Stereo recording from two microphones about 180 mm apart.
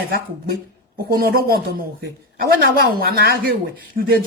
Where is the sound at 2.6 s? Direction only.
60° right (ahead or behind).